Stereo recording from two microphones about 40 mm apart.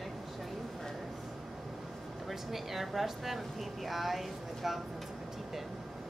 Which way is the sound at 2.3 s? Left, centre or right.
Centre.